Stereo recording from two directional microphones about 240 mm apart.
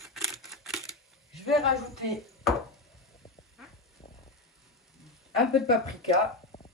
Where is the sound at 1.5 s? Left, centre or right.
Centre.